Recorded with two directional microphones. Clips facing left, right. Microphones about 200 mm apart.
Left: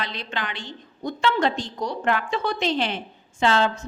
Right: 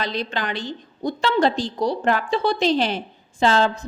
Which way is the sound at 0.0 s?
40° right (ahead or behind).